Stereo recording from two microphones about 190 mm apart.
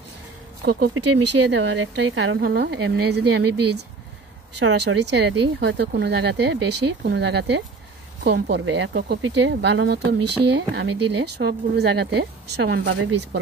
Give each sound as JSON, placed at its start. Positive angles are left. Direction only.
{"t": 0.6, "sound": "speech", "side_deg": -60}
{"t": 0.9, "sound": "speech", "side_deg": -80}